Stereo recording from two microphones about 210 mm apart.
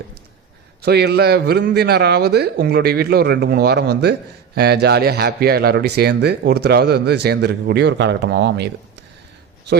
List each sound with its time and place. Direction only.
0.8 s speech: 50° right (ahead or behind)